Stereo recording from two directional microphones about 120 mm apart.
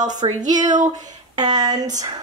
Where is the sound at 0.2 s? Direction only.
40° right (ahead or behind).